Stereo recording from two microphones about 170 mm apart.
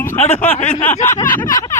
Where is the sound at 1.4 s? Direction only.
20° left (ahead or behind).